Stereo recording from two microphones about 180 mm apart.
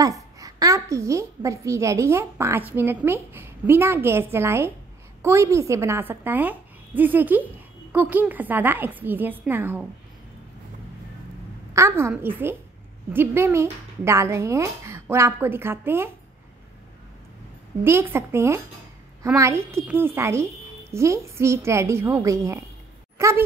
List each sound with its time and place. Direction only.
0.0 s a child's voice: 20° right (ahead or behind)
11.7 s a child's voice: 15° right (ahead or behind)
17.8 s a child's voice: 15° right (ahead or behind)